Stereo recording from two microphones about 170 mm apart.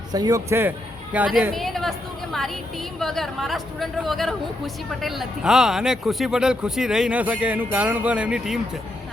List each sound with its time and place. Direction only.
0.1 s a man's voice: 20° right (ahead or behind); by 8.6 s 5° right (ahead or behind)